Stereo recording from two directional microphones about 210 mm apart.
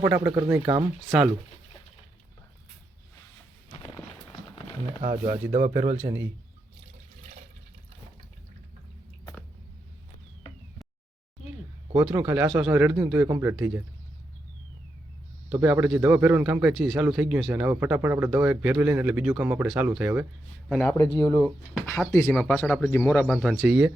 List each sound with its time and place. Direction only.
0.0 s a man's voice: 10° right (ahead or behind)
1.0 s speech: centre (ahead or behind)
3.7 s a sound: 20° left (ahead or behind)
5.2 s a man's voice: 35° right (ahead or behind)
12.0 s a man's voice: 10° right (ahead or behind)
15.4 s a man's voice: 5° right (ahead or behind)
20.7 s speech: 5° left (ahead or behind)